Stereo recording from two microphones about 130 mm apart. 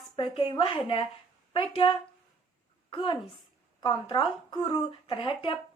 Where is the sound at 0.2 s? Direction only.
40° left (ahead or behind).